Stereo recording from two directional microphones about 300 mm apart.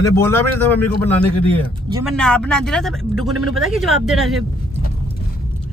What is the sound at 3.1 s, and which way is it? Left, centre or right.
Speech, right.